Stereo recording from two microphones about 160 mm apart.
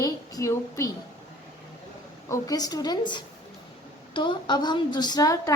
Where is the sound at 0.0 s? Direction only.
20° left (ahead or behind).